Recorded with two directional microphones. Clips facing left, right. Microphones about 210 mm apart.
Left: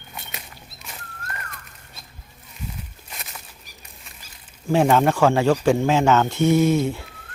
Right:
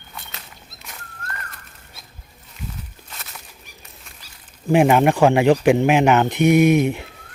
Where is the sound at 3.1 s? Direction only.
10° left (ahead or behind).